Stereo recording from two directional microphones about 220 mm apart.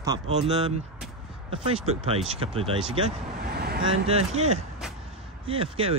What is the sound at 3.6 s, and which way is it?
Vehicle, 45° right (ahead or behind).